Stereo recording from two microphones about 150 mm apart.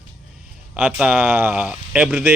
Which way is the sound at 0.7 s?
10° right (ahead or behind).